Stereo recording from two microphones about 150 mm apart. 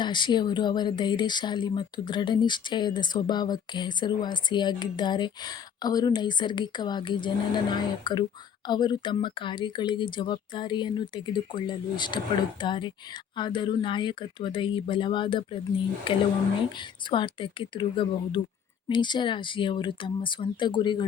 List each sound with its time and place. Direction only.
0.0 s speech: 30° left (ahead or behind)